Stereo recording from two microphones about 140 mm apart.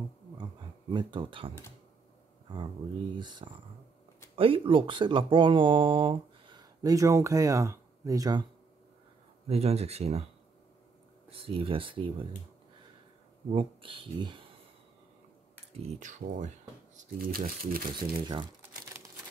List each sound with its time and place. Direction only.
0.9 s speech: 35° right (ahead or behind)
3.2 s speech: 35° right (ahead or behind)
9.5 s speech: 45° right (ahead or behind)
11.2 s speech: 40° right (ahead or behind)
13.5 s speech: 40° right (ahead or behind)
16.0 s speech: 65° right (ahead or behind)
16.9 s speech: 75° right (ahead or behind)